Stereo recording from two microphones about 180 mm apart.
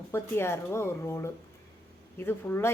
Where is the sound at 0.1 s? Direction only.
15° left (ahead or behind).